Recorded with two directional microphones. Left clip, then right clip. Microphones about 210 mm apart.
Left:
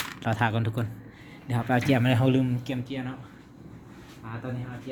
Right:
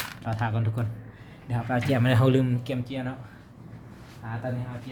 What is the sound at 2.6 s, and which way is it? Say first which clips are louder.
Speech: right 1 dB; centre (ahead or behind).